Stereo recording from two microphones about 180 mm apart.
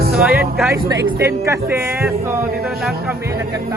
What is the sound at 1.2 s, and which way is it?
Speech, 15° right (ahead or behind).